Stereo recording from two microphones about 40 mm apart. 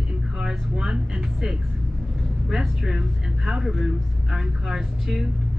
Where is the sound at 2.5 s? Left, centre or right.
Centre.